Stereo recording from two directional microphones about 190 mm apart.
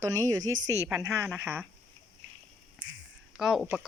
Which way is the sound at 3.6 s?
5° right (ahead or behind).